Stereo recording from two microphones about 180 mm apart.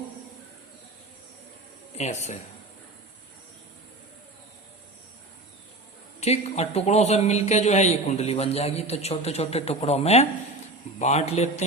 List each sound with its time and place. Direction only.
2.0 s a man's voice: 40° left (ahead or behind)
6.1 s a man's voice: 35° left (ahead or behind)